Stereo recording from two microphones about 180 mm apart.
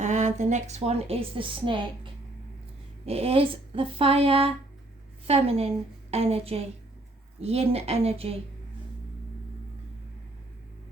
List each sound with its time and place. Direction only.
0.0 s a woman's voice: 40° right (ahead or behind)
3.1 s a woman's voice: 35° right (ahead or behind)